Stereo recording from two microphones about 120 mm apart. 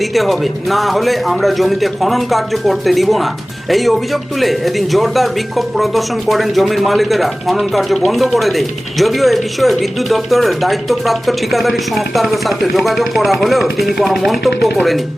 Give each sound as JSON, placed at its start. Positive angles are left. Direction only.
{"t": 0.0, "sound": "a man's voice", "side_deg": 0}